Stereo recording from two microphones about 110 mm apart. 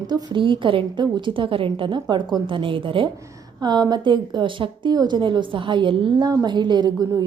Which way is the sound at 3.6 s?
40° right (ahead or behind).